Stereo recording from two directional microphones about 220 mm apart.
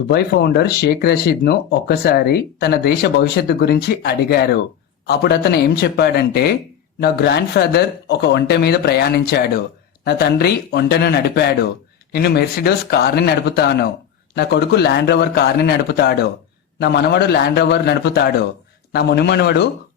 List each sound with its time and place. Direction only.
0.1 s speech: 45° left (ahead or behind)